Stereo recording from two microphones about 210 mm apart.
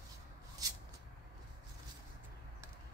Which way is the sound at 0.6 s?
15° right (ahead or behind).